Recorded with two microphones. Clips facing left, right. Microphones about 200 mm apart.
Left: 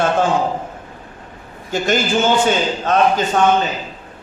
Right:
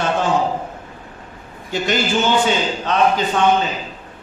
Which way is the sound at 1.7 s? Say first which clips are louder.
Left 2 dB; 45° left (ahead or behind).